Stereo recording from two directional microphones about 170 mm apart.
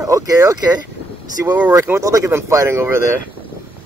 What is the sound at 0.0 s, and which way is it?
Speech, 20° right (ahead or behind).